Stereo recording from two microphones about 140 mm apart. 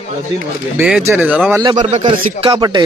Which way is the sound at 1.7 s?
60° right (ahead or behind).